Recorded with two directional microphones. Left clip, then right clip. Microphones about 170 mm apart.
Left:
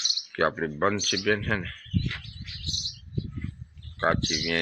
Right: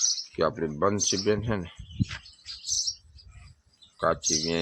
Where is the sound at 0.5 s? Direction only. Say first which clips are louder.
Even; 5° right (ahead or behind).